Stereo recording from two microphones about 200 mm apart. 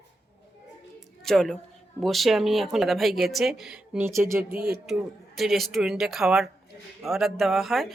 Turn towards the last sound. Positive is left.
turn(degrees=0)  # may be behind; listen again after turning